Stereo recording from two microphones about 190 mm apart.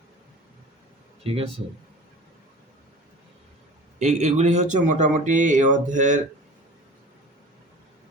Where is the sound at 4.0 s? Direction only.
35° right (ahead or behind).